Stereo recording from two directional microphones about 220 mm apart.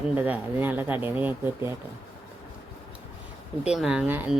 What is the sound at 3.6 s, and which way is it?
Speech, 5° right (ahead or behind).